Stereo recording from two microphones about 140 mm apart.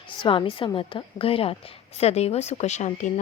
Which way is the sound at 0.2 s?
35° left (ahead or behind).